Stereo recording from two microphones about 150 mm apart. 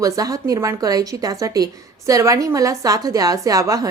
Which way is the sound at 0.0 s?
25° right (ahead or behind).